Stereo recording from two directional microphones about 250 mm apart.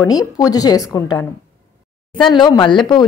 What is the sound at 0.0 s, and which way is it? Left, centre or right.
A woman's voice, centre.